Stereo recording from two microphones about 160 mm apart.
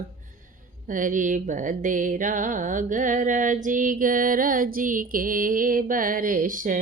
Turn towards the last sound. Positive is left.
turn(degrees=-55)  # may be behind; listen again after turning